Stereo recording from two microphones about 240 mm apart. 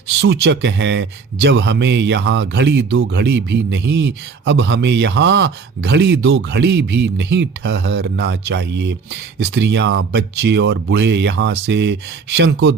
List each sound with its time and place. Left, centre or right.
0.2 s a man's voice: right